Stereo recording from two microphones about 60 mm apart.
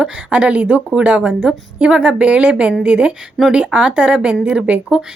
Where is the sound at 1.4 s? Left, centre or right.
Centre.